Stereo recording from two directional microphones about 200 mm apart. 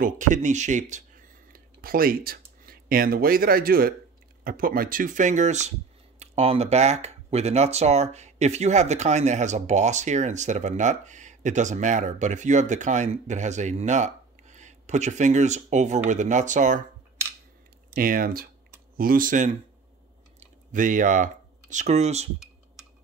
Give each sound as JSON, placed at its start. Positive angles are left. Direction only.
{"t": 0.0, "sound": "speech", "side_deg": -40}
{"t": 17.9, "sound": "speech", "side_deg": -45}